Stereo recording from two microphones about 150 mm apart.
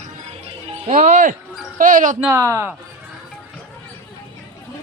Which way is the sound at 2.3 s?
20° right (ahead or behind).